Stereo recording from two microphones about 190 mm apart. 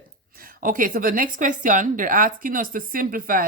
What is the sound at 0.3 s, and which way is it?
A woman's voice, 50° right (ahead or behind).